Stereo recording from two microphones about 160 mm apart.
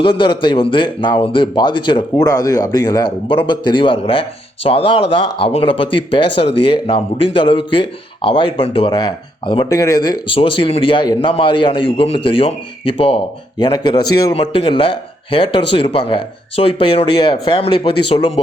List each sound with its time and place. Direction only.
0.0 s a man's voice: 30° left (ahead or behind)